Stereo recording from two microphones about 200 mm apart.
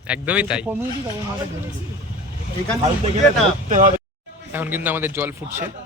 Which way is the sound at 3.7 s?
40° right (ahead or behind).